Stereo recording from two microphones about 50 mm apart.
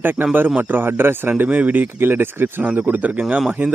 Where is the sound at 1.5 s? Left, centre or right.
Right.